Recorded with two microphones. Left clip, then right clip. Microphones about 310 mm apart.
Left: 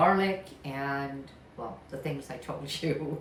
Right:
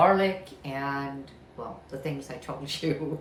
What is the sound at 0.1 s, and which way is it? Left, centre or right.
Speech, centre.